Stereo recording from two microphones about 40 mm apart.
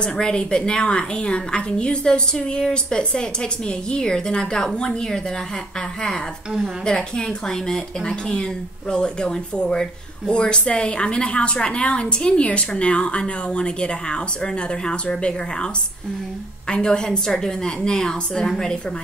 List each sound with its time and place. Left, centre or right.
0.0 s a woman's voice: centre